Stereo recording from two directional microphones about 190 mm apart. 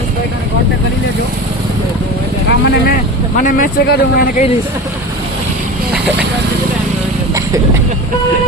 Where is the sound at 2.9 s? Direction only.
45° left (ahead or behind).